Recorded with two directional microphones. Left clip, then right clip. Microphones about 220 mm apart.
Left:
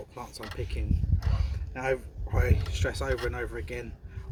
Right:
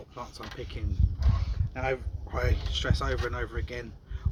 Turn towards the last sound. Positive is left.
turn(degrees=0)  # may be behind; listen again after turning